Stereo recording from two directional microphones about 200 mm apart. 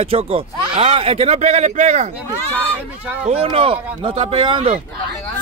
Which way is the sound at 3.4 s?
25° right (ahead or behind).